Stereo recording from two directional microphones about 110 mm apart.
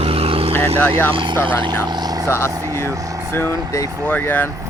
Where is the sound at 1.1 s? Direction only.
45° right (ahead or behind).